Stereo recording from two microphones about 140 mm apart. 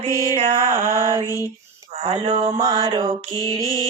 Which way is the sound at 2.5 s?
30° right (ahead or behind).